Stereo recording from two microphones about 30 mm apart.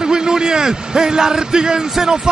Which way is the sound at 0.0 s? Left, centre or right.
Right.